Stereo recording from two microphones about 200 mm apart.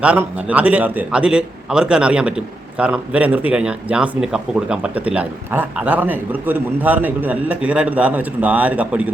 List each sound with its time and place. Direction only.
0.0 s a man's voice: 5° right (ahead or behind)